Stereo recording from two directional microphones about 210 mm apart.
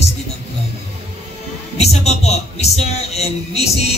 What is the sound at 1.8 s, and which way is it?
Speech, 30° left (ahead or behind).